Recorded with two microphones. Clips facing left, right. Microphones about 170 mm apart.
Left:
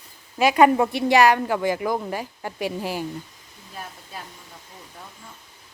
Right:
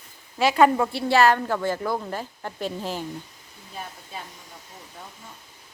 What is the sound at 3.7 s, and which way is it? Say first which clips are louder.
Speech: right 1 dB; centre (ahead or behind).